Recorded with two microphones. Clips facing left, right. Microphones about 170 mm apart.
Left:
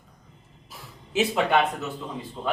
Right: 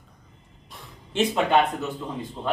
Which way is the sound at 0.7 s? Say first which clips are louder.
Left 4 dB; 5° left (ahead or behind).